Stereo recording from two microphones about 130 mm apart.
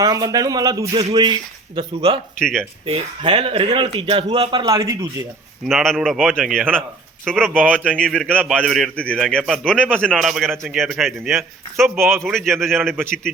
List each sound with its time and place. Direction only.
0.0 s speech: 30° right (ahead or behind)
2.4 s a man's voice: 5° left (ahead or behind)
2.8 s speech: 45° right (ahead or behind)
4.6 s speech: 25° right (ahead or behind)
5.6 s a man's voice: centre (ahead or behind)
7.5 s speech: 15° right (ahead or behind)
7.9 s a man's voice: 5° left (ahead or behind)
11.3 s speech: 20° right (ahead or behind)
12.2 s a man's voice: 5° left (ahead or behind)